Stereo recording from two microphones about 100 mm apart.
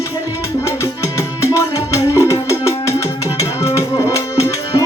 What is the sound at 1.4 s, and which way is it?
Music, 30° left (ahead or behind).